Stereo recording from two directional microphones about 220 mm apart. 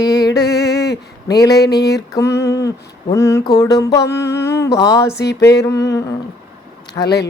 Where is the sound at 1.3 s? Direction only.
15° left (ahead or behind).